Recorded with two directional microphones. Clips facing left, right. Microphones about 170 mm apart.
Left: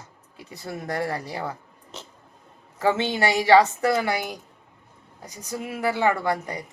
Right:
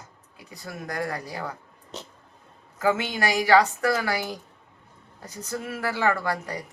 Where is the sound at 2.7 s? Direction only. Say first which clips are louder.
Left 2 dB; 25° left (ahead or behind).